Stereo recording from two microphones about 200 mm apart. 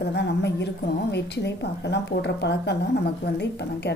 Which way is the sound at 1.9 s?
60° left (ahead or behind).